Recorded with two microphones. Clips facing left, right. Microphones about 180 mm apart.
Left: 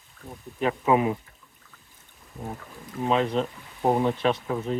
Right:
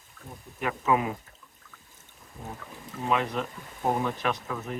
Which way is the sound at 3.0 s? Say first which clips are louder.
Left 4 dB; 30° left (ahead or behind).